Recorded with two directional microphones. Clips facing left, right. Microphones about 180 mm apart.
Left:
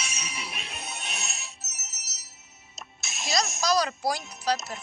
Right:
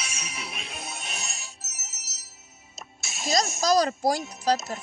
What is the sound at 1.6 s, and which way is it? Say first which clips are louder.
Music: right 1 dB; 25° right (ahead or behind).